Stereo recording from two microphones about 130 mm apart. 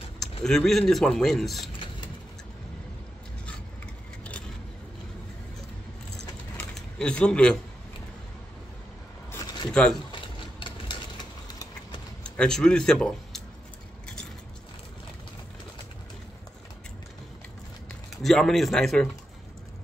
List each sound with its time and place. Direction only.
0.4 s a man's voice: 5° left (ahead or behind)
6.5 s a sound: 10° left (ahead or behind)
9.3 s a sound: 25° left (ahead or behind)
9.7 s speech: 10° left (ahead or behind)
10.6 s typewriter: 35° left (ahead or behind)
12.2 s speech: 5° left (ahead or behind)
18.2 s a man's voice: centre (ahead or behind)